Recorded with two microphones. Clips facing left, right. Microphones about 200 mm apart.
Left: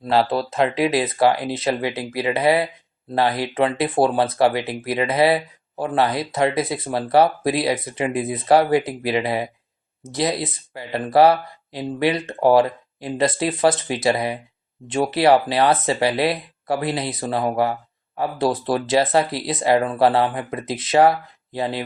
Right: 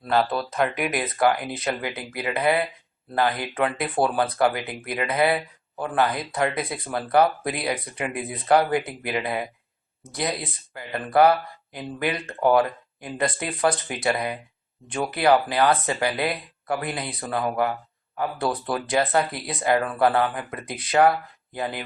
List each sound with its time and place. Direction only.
0.0 s speech: 25° left (ahead or behind)